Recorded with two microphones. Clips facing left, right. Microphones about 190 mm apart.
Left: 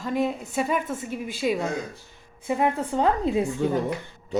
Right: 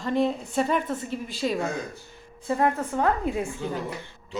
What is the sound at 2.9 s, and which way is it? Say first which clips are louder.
Speech: left 3 dB; 25° left (ahead or behind).